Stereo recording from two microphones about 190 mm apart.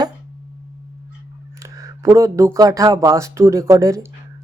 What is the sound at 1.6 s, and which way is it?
Speech, 15° right (ahead or behind).